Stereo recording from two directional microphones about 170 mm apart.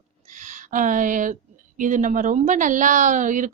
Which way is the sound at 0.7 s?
50° right (ahead or behind).